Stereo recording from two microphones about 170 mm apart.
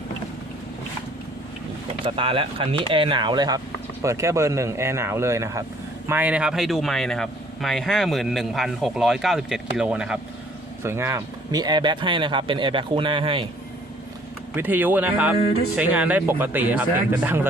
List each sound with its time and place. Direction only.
2.0 s speech: 30° right (ahead or behind); by 10.2 s 5° right (ahead or behind)
10.8 s speech: 15° right (ahead or behind); by 13.5 s 30° right (ahead or behind)
14.5 s speech: 10° right (ahead or behind)